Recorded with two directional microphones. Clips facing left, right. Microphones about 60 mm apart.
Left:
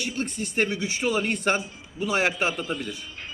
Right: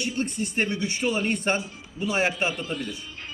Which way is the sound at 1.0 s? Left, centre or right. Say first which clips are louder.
Left 1 dB; left.